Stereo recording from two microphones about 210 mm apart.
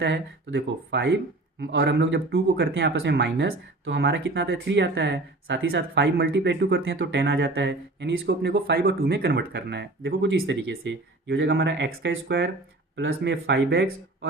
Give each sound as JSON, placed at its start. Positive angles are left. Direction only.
{"t": 0.0, "sound": "speech", "side_deg": -55}